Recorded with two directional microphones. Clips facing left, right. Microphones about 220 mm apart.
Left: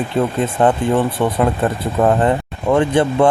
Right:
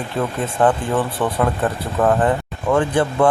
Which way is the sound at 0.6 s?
25° left (ahead or behind).